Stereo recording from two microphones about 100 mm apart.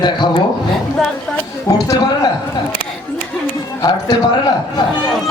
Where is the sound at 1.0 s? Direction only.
5° left (ahead or behind).